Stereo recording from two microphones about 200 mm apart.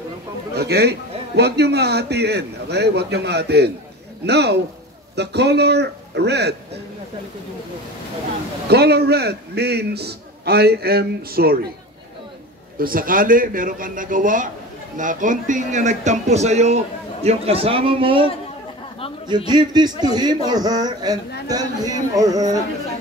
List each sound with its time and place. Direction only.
0.6 s a man's voice: 55° right (ahead or behind)
8.6 s a man's voice: 55° right (ahead or behind)
12.7 s a man's voice: 45° right (ahead or behind); by 22.6 s 15° right (ahead or behind)